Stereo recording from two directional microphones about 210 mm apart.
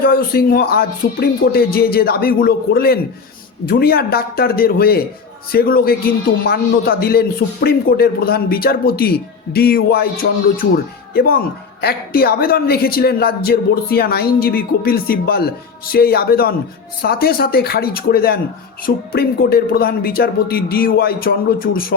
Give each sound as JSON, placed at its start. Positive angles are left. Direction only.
{"t": 0.0, "sound": "a man's voice", "side_deg": 45}